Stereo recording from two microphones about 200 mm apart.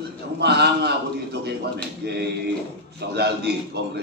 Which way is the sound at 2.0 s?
55° right (ahead or behind).